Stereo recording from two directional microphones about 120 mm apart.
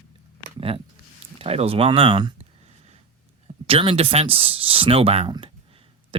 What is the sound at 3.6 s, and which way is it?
Speech, 50° right (ahead or behind).